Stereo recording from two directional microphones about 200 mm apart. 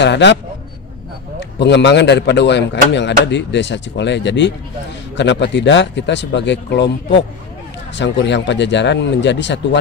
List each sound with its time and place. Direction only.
0.0 s speech: 60° left (ahead or behind)
1.4 s speech: 60° left (ahead or behind)